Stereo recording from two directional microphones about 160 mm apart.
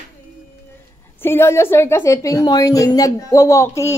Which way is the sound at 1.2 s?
15° left (ahead or behind).